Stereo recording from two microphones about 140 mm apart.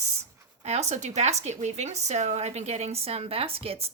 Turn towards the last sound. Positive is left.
turn(degrees=-45)  # may be behind; listen again after turning